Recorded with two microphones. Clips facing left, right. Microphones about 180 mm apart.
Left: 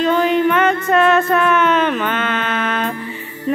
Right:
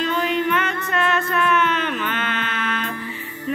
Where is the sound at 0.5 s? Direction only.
45° left (ahead or behind).